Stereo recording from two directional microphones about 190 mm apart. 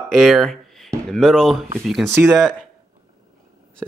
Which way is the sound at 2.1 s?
15° right (ahead or behind).